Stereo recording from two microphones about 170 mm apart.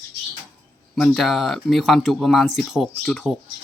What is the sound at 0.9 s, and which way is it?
Speech, centre (ahead or behind).